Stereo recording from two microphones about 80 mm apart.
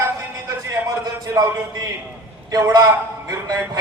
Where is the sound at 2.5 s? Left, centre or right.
Right.